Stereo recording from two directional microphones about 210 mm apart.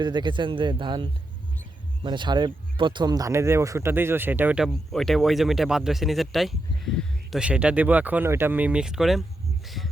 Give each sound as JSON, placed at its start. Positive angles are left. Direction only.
{"t": 0.0, "sound": "speech", "side_deg": -20}